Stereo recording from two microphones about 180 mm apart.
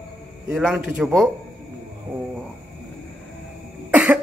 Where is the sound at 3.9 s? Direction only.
10° right (ahead or behind).